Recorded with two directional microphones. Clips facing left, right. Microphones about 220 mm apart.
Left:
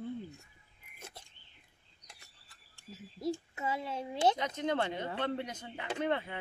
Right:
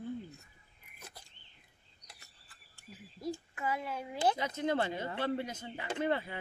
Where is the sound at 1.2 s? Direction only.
25° left (ahead or behind).